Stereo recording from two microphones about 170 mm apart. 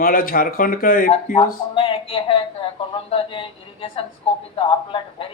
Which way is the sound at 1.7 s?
30° left (ahead or behind).